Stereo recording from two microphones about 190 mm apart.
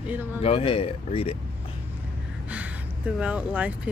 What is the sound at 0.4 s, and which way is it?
Speech, 30° left (ahead or behind).